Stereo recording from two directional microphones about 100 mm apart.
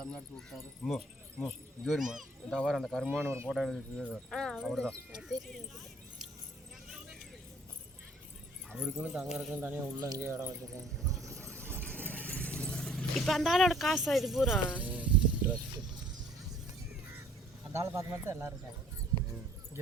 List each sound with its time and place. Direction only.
0.0 s speech: 5° left (ahead or behind)
3.2 s speech: 25° right (ahead or behind)
3.5 s speech: centre (ahead or behind)
8.8 s speech: 5° right (ahead or behind)
9.5 s speech: 20° right (ahead or behind)
10.0 s speech: 30° right (ahead or behind)
11.3 s a sound: 5° left (ahead or behind); by 15.5 s 15° right (ahead or behind)
17.7 s speech: 30° right (ahead or behind)